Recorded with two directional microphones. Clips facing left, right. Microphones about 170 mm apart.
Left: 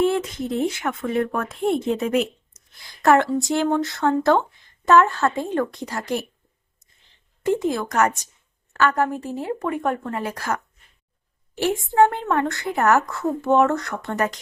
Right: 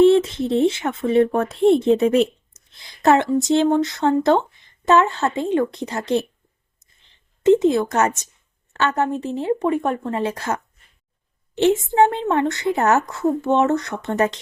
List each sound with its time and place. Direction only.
0.0 s a woman's voice: 25° right (ahead or behind)
7.4 s a woman's voice: 25° right (ahead or behind)